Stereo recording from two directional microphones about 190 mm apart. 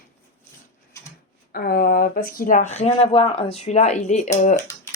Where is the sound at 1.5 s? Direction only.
50° left (ahead or behind).